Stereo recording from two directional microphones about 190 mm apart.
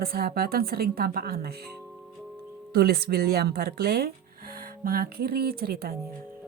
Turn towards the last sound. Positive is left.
turn(degrees=-50)  # may be behind; listen again after turning